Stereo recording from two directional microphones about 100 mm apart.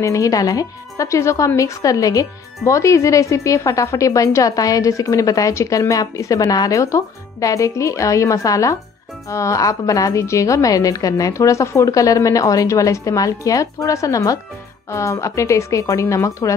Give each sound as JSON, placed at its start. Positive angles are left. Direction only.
{"t": 0.0, "sound": "speech", "side_deg": 35}